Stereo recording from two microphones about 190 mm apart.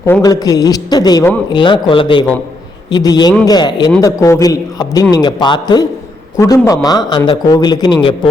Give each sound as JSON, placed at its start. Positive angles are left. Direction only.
{"t": 0.0, "sound": "a man's voice", "side_deg": 15}